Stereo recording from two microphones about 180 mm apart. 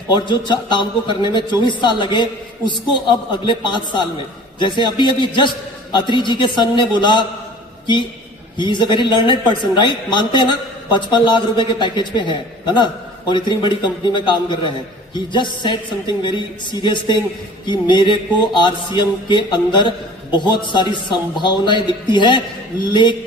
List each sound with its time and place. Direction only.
0.1 s a man's voice: 25° left (ahead or behind)
8.5 s a man's voice: 25° left (ahead or behind)